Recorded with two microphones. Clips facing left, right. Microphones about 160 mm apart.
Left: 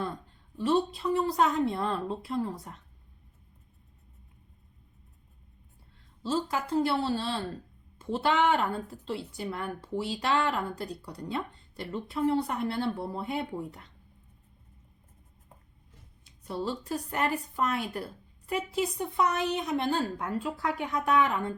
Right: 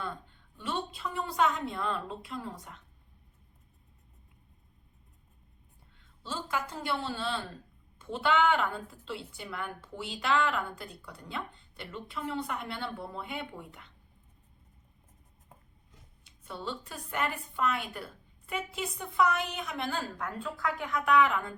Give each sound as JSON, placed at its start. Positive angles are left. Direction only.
{"t": 0.0, "sound": "a woman's voice", "side_deg": 35}
{"t": 6.2, "sound": "a woman's voice", "side_deg": 35}
{"t": 16.2, "sound": "a woman's voice", "side_deg": 40}